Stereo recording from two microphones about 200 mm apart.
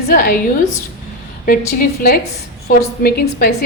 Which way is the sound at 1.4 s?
45° left (ahead or behind).